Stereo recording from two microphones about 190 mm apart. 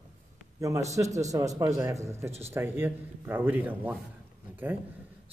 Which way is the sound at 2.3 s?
35° right (ahead or behind).